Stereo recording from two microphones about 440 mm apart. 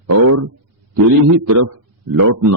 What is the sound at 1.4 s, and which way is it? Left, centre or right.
A man's voice, right.